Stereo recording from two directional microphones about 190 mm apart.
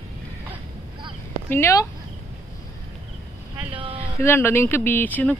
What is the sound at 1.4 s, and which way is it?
Speech, 15° left (ahead or behind).